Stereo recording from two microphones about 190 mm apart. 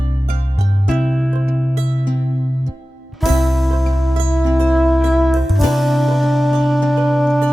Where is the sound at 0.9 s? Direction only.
Centre (ahead or behind).